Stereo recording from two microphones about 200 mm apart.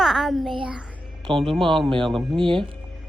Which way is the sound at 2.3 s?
25° right (ahead or behind).